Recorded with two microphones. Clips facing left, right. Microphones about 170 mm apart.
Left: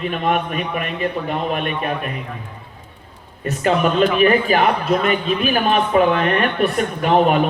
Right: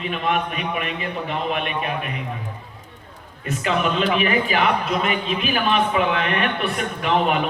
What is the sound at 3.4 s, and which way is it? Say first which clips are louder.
A man's voice: left 5 dB; 40° left (ahead or behind).